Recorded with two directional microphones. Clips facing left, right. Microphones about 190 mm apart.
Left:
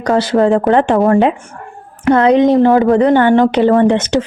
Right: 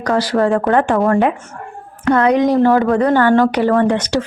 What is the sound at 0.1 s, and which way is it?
A woman's voice, 25° left (ahead or behind).